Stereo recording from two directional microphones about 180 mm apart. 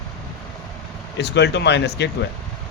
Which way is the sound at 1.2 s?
70° left (ahead or behind).